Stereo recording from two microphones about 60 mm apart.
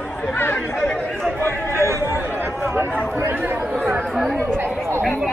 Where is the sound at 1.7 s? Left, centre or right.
Right.